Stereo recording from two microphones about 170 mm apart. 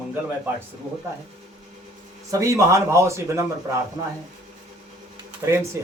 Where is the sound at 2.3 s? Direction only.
20° right (ahead or behind).